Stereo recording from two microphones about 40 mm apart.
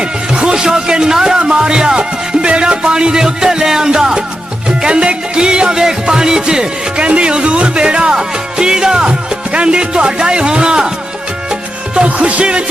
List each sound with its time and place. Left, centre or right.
0.0 s speech: right
12.0 s speech: right